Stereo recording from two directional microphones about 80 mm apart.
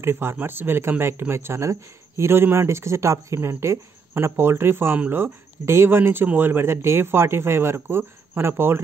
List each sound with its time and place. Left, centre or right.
0.0 s speech: right